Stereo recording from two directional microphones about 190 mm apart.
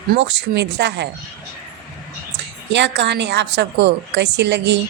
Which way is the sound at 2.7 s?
70° right (ahead or behind).